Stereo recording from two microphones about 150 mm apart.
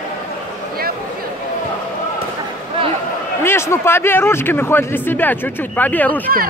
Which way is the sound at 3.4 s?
15° left (ahead or behind).